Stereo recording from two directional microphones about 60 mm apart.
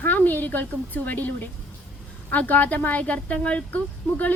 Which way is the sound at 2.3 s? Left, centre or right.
Left.